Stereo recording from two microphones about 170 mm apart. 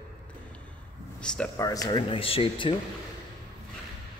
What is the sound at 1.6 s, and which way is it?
Speech, 20° left (ahead or behind).